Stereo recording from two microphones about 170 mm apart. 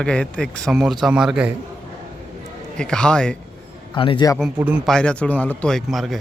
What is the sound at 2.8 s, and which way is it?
Speech, 5° left (ahead or behind).